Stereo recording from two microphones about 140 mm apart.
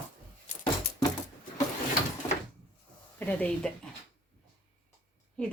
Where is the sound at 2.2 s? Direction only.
20° left (ahead or behind).